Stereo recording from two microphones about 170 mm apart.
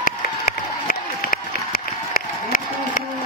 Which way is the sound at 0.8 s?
60° left (ahead or behind).